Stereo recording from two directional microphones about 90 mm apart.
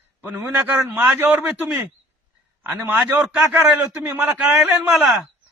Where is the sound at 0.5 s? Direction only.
25° right (ahead or behind).